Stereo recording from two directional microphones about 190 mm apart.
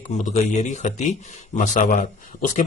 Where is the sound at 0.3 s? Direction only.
40° left (ahead or behind).